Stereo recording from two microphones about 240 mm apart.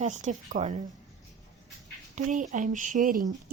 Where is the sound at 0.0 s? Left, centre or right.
Right.